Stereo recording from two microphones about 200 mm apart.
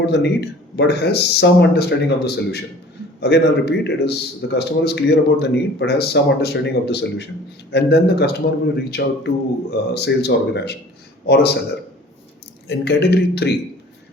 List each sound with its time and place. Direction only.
0.0 s a man's voice: 60° left (ahead or behind)
12.6 s a man's voice: 55° left (ahead or behind)